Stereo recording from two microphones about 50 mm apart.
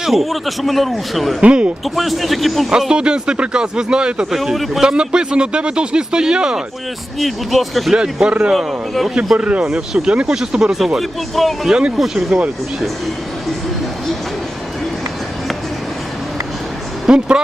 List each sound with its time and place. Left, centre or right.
0.0 s a man's voice: centre
1.4 s speech: right
1.8 s a man's voice: centre
2.6 s speech: centre
4.5 s a man's voice: centre
4.8 s speech: centre
7.2 s a man's voice: centre
7.9 s speech: centre
8.5 s a man's voice: centre
9.4 s a man's voice: right; by 11.4 s centre
11.7 s speech: right
11.9 s speech: centre
17.1 s speech: centre